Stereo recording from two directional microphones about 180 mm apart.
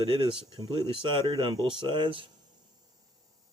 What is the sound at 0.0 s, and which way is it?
Speech, 30° right (ahead or behind).